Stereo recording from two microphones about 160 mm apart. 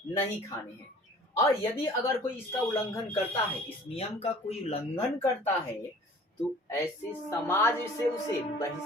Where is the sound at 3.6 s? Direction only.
35° left (ahead or behind).